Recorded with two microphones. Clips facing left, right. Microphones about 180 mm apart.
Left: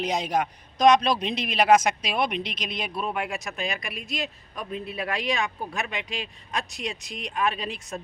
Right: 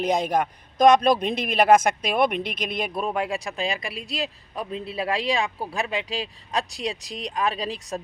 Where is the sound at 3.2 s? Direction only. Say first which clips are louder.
Right 4 dB; 30° right (ahead or behind).